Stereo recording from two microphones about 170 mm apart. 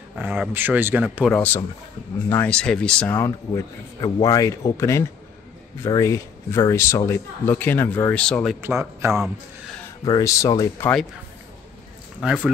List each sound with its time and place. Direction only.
0.2 s a man's voice: 10° right (ahead or behind)
1.3 s speech: 10° left (ahead or behind)
3.1 s speech: 15° left (ahead or behind)
8.5 s a man's voice: 15° right (ahead or behind)
10.0 s speech: 20° left (ahead or behind)
12.2 s speech: 5° right (ahead or behind)